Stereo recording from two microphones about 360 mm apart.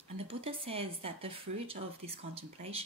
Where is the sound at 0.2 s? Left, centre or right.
Centre.